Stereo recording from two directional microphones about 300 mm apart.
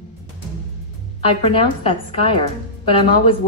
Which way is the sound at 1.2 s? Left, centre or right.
Centre.